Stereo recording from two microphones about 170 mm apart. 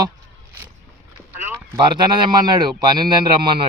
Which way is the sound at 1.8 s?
30° right (ahead or behind).